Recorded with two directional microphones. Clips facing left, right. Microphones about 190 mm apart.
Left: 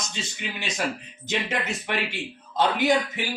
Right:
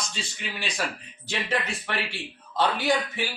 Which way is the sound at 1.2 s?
20° left (ahead or behind).